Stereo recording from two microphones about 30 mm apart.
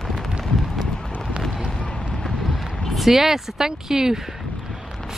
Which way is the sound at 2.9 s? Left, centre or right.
Centre.